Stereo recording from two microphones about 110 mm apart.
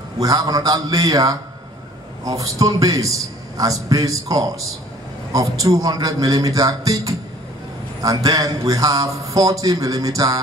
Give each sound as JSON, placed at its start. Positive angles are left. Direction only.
{"t": 0.2, "sound": "a man's voice", "side_deg": -35}